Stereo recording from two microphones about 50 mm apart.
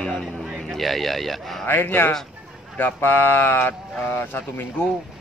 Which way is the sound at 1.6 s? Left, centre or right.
Left.